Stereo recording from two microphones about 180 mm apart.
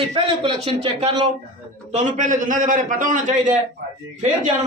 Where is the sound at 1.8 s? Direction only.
45° right (ahead or behind).